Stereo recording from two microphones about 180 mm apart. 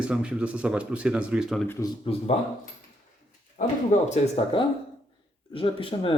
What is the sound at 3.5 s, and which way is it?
Speech, 40° left (ahead or behind).